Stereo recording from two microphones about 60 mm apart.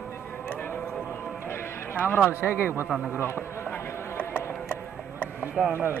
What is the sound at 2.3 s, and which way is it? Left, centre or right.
Speech, right.